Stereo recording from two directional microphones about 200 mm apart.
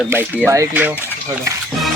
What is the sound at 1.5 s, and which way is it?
Stir, 15° right (ahead or behind).